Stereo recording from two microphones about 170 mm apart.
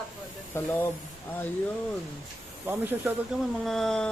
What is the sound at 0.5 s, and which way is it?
Speech, 15° left (ahead or behind).